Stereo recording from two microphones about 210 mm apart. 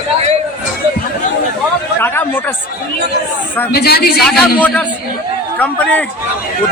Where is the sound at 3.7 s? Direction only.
45° left (ahead or behind).